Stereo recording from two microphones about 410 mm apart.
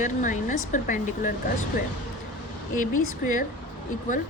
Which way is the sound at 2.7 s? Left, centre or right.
Centre.